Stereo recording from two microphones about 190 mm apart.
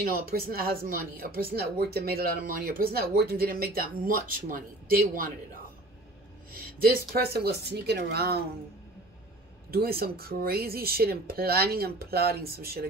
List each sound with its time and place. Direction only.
0.0 s speech: 50° right (ahead or behind)
6.8 s speech: 50° right (ahead or behind)
9.7 s speech: 55° right (ahead or behind)